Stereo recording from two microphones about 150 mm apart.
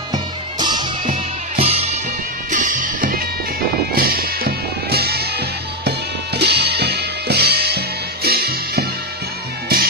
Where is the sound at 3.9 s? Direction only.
80° right.